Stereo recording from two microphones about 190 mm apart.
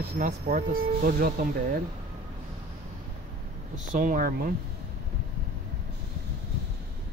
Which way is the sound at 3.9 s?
45° right (ahead or behind).